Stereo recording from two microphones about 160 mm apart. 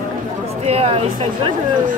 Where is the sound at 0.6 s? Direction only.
40° right (ahead or behind).